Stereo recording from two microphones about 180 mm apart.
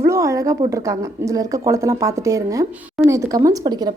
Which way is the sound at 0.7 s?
15° right (ahead or behind).